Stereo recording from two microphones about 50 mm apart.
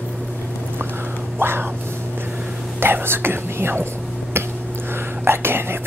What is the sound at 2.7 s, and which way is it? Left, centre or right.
Whispering, right.